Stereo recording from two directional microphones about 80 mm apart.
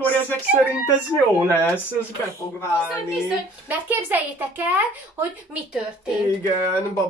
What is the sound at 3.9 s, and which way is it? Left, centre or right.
Speech, right.